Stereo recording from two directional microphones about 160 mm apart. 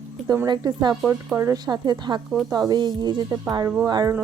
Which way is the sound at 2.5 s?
25° right (ahead or behind).